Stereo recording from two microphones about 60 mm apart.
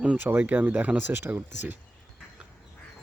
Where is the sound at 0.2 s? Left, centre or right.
Right.